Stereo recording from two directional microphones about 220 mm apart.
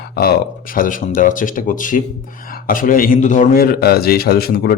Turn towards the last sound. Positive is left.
turn(degrees=45)  # may be behind; listen again after turning